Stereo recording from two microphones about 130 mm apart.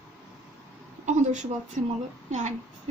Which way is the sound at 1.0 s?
70° right (ahead or behind).